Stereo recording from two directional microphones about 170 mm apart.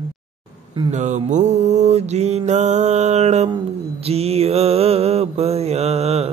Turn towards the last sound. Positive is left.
turn(degrees=-35)  # may be behind; listen again after turning